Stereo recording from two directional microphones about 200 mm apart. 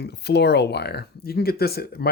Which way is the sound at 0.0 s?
55° left (ahead or behind).